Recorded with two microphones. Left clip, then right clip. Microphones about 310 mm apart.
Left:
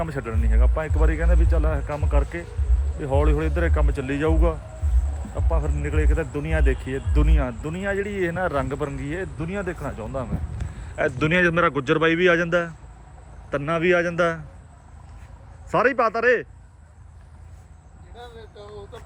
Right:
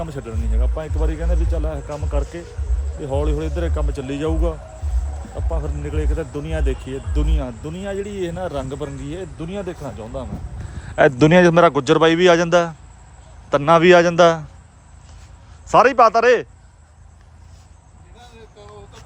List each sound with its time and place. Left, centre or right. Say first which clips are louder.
0.0 s speech: left 1 dB; centre
15.7 s speech: right 8 dB; centre